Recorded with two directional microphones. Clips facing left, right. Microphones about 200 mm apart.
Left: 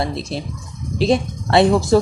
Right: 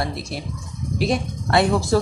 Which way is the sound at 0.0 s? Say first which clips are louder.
Left 4 dB; 25° left (ahead or behind).